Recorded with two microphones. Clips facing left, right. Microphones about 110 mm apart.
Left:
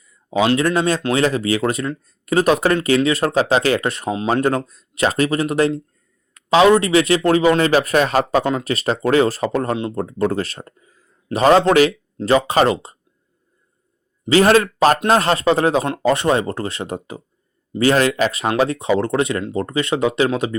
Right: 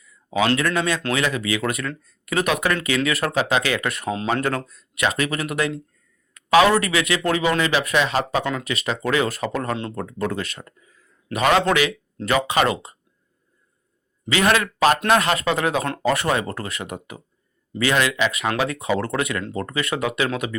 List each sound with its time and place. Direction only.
0.0 s a man's voice: 30° left (ahead or behind)
6.3 s a man's voice: 25° left (ahead or behind)
9.7 s speech: 15° left (ahead or behind)
10.0 s a man's voice: 30° left (ahead or behind)
14.3 s a man's voice: 35° left (ahead or behind)